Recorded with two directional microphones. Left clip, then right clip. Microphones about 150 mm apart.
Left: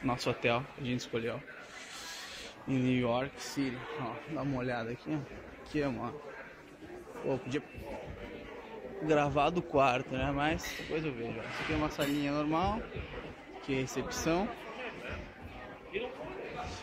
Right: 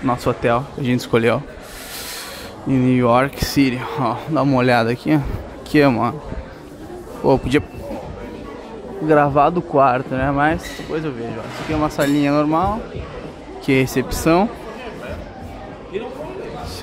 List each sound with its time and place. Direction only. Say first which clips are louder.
0.0 s speech: right 13 dB; 10° right (ahead or behind)
0.8 s speech: right 19 dB; 35° right (ahead or behind)
2.7 s speech: right 15 dB; 20° right (ahead or behind)
3.3 s speech: right 18 dB; 50° right (ahead or behind)
7.2 s speech: right 19 dB; 45° right (ahead or behind)
9.0 s speech: right 15 dB; 15° right (ahead or behind)
10.9 s speech: right 13 dB; 5° right (ahead or behind)
11.8 s speech: right 19 dB; 30° right (ahead or behind)
12.4 s speech: right 14 dB; 10° right (ahead or behind)
13.7 s speech: right 17 dB; 40° right (ahead or behind)